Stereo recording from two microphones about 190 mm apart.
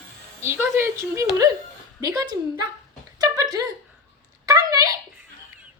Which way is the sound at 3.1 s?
20° right (ahead or behind).